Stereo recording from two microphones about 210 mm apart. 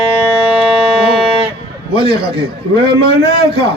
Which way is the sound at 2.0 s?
50° right (ahead or behind).